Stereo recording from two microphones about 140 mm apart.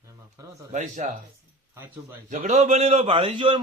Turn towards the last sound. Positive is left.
turn(degrees=-35)  # may be behind; listen again after turning